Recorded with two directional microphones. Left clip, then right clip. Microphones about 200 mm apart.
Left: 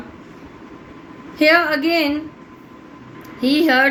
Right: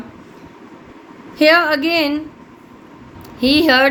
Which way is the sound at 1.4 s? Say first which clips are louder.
Right 2 dB; 50° right (ahead or behind).